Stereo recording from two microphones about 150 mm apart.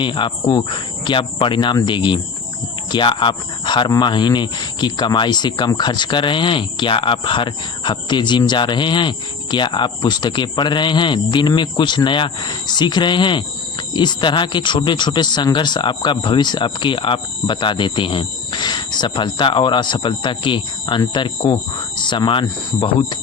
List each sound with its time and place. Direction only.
0.0 s speech: 30° left (ahead or behind)